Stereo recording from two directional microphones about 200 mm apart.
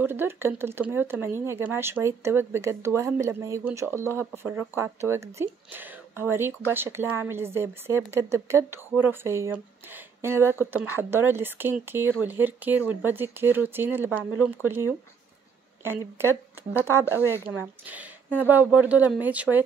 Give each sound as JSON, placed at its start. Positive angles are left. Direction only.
{"t": 0.0, "sound": "speech", "side_deg": -10}
{"t": 15.8, "sound": "speech", "side_deg": -10}
{"t": 17.5, "sound": "speech", "side_deg": -5}